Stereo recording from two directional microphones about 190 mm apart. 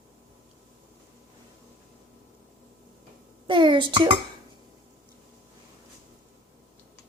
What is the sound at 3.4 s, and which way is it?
Speech, 25° right (ahead or behind).